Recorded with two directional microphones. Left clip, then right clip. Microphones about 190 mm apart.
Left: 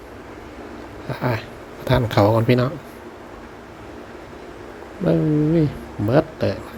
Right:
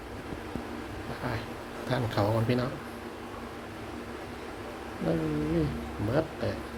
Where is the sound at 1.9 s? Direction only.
35° left (ahead or behind).